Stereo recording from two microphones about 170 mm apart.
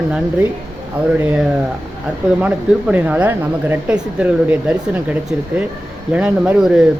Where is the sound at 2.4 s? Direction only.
10° right (ahead or behind).